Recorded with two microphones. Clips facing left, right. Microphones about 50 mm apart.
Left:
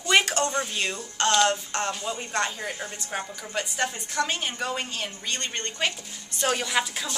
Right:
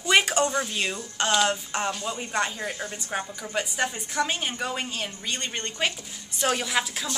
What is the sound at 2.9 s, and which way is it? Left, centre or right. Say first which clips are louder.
Speech: right 1 dB; centre.